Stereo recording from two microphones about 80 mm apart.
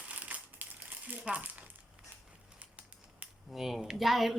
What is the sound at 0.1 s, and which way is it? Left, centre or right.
Crumpling, centre.